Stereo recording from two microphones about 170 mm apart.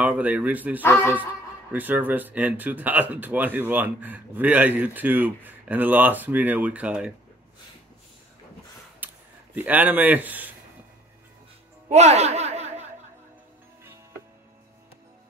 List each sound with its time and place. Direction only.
0.0 s speech: 10° right (ahead or behind)
9.0 s speech: 10° right (ahead or behind)
11.9 s a sound: 40° right (ahead or behind)